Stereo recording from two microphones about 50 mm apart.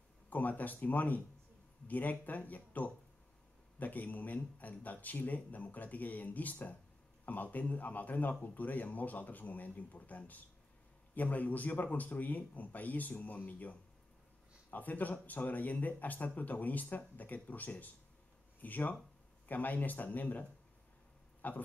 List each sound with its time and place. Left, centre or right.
0.3 s speech: left